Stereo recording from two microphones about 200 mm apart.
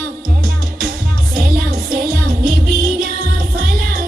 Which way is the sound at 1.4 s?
50° right (ahead or behind).